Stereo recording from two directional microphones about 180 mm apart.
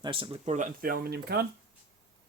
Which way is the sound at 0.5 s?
50° right (ahead or behind).